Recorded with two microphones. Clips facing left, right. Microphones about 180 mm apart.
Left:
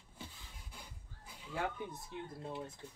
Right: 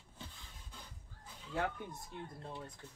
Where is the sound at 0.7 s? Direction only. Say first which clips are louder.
Even; 10° left (ahead or behind).